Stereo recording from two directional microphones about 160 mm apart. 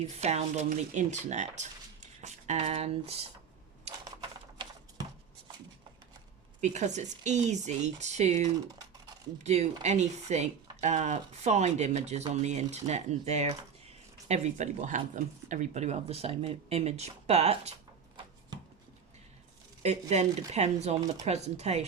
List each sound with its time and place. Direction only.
0.0 s speech: 45° right (ahead or behind)
4.2 s typing: 25° right (ahead or behind)
6.6 s speech: 45° right (ahead or behind)
8.5 s typing: 25° right (ahead or behind)
9.4 s speech: 45° right (ahead or behind)
19.8 s speech: 45° right (ahead or behind)